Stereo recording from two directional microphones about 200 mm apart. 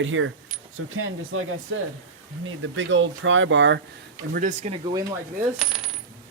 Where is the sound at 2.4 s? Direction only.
75° right (ahead or behind).